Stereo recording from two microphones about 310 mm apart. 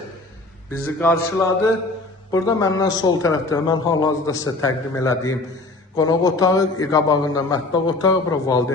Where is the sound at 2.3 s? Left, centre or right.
Centre.